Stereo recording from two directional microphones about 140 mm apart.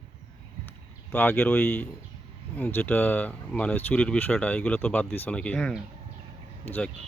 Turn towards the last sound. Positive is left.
turn(degrees=10)  # may be behind; listen again after turning